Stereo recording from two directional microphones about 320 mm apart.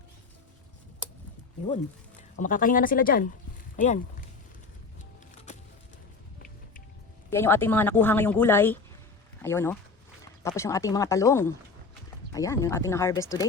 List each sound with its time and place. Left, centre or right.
2.3 s speech: left
7.3 s speech: centre